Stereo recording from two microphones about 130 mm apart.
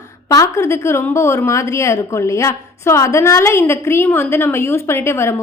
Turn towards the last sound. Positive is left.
turn(degrees=20)  # may be behind; listen again after turning